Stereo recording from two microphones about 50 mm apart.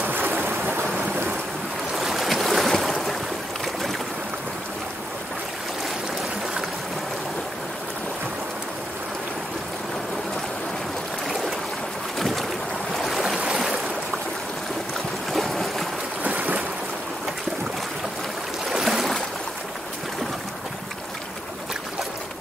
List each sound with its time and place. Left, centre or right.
0.0 s stream: right
2.0 s boat: centre
12.2 s boat: centre
13.0 s stream: centre
15.3 s boat: centre
16.2 s boat: right
18.7 s a sound: centre